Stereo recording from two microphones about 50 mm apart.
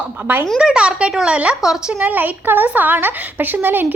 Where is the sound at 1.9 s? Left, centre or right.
Right.